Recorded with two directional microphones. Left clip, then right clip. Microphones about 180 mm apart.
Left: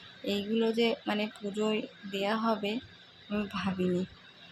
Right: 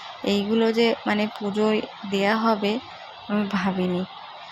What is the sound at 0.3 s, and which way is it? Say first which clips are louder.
A woman's voice: right 8 dB; 5° right (ahead or behind).